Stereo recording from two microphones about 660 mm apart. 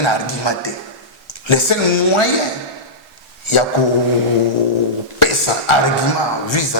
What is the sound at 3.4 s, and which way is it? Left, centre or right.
Speech, left.